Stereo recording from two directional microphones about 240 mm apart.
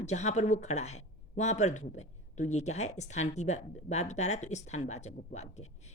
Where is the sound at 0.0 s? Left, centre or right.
Left.